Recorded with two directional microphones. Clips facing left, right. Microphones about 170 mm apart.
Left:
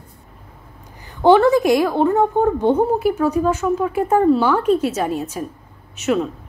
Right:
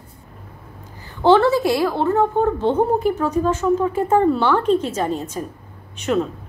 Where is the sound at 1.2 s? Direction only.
15° left (ahead or behind).